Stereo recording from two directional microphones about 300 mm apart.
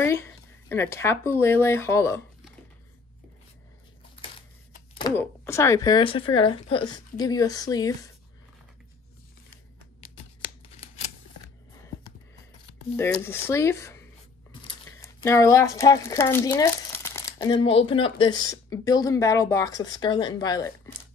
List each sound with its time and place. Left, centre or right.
0.0 s speech: centre
4.9 s speech: centre
12.9 s speech: centre